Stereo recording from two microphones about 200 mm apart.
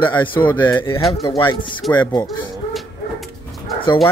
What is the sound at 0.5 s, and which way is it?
Speech, 10° left (ahead or behind).